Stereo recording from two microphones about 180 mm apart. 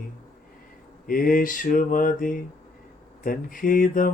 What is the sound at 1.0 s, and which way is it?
Mantra, 50° left (ahead or behind).